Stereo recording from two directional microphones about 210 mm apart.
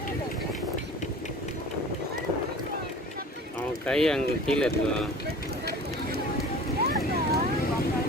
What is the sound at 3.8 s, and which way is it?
Speech, 5° left (ahead or behind).